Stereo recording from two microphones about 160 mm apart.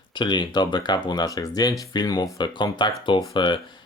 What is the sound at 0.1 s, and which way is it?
Speech, 30° left (ahead or behind).